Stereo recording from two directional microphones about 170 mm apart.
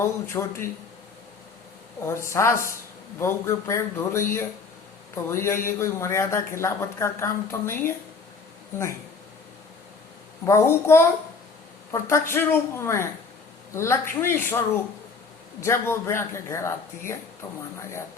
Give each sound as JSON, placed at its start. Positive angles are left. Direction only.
{"t": 0.0, "sound": "a man's voice", "side_deg": 15}
{"t": 2.0, "sound": "a man's voice", "side_deg": 15}
{"t": 10.4, "sound": "a man's voice", "side_deg": 15}
{"t": 15.6, "sound": "a man's voice", "side_deg": 15}